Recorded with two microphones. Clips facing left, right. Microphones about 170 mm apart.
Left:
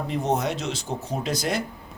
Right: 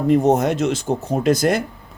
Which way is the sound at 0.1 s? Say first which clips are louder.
Right 10 dB; 50° right (ahead or behind).